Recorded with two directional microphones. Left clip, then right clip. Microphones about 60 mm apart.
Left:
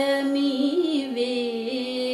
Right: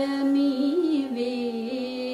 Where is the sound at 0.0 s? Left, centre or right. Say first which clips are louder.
Left 2 dB; left.